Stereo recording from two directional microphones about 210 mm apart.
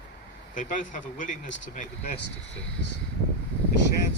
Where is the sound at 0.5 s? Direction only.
40° left (ahead or behind).